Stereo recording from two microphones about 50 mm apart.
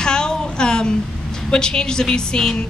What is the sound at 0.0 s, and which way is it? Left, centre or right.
A woman's voice, centre.